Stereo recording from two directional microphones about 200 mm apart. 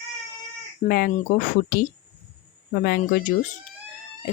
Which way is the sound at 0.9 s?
50° left (ahead or behind).